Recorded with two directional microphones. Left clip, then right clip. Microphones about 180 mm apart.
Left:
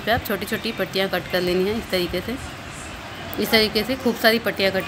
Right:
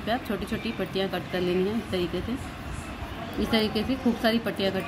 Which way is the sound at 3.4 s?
15° left (ahead or behind).